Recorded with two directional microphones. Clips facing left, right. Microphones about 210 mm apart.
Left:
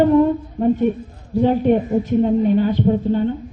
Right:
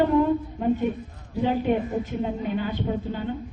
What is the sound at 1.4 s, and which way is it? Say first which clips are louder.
Speech: left 7 dB; 40° left (ahead or behind).